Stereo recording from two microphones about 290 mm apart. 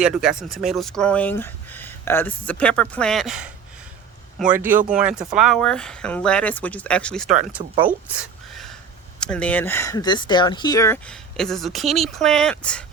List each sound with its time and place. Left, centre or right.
0.0 s speech: centre
7.6 s speech: centre
8.1 s a sound: centre
9.2 s speech: centre